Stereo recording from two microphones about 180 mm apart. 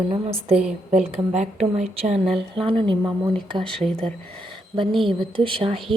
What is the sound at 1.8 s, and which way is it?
Speech, 40° right (ahead or behind).